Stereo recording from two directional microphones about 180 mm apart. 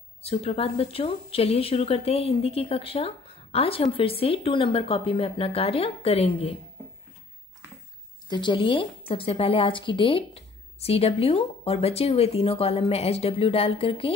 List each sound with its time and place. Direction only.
0.2 s speech: 35° left (ahead or behind)
8.3 s speech: 25° left (ahead or behind)